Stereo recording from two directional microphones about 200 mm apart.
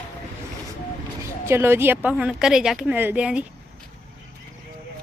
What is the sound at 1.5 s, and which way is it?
A woman's voice, 10° right (ahead or behind).